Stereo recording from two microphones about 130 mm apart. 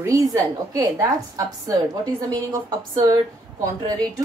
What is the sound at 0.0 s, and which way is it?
A woman's voice, 25° right (ahead or behind).